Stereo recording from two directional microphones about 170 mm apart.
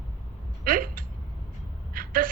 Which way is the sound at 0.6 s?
55° right (ahead or behind).